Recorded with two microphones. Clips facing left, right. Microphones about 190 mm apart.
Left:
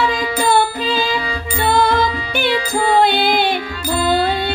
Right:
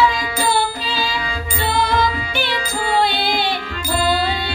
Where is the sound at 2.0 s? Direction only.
55° left (ahead or behind).